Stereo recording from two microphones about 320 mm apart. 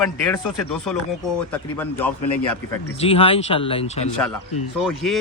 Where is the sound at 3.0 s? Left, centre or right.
Centre.